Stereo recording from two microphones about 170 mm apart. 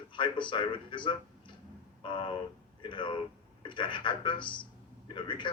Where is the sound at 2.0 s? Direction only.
30° left (ahead or behind).